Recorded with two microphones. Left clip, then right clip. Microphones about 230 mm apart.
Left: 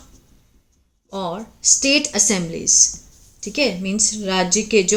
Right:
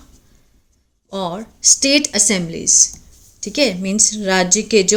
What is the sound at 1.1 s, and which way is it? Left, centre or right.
Speech, right.